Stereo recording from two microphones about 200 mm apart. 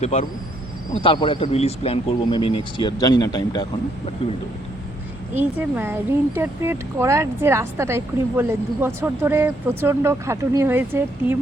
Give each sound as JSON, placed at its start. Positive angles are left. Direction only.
{"t": 0.0, "sound": "a man's voice", "side_deg": 30}
{"t": 5.3, "sound": "speech", "side_deg": -10}